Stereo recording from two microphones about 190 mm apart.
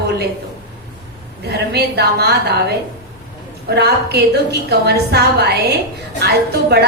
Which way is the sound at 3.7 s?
60° right (ahead or behind).